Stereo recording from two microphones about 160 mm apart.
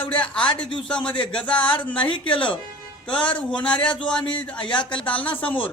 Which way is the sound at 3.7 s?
30° left (ahead or behind).